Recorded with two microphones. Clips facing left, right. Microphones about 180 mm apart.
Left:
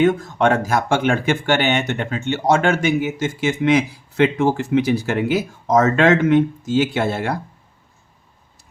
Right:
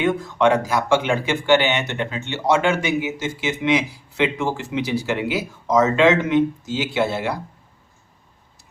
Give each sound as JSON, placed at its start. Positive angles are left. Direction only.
{"t": 0.0, "sound": "speech", "side_deg": 45}